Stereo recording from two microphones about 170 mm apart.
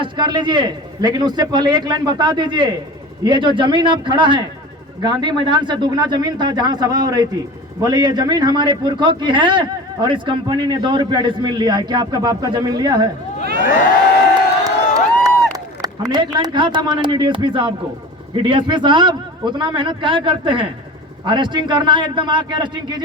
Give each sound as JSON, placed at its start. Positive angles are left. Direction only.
{"t": 0.0, "sound": "a man's voice", "side_deg": -25}
{"t": 14.6, "sound": "crowd", "side_deg": -20}
{"t": 15.5, "sound": "a man's voice", "side_deg": -25}